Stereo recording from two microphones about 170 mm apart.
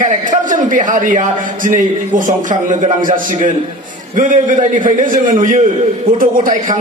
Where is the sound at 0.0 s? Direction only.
50° right (ahead or behind).